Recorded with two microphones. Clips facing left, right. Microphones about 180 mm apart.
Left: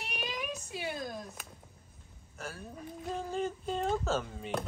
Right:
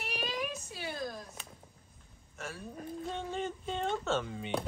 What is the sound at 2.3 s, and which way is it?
Speech, centre (ahead or behind).